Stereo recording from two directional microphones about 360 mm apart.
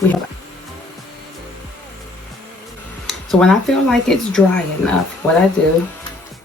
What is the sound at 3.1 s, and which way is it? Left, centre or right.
Speech, centre.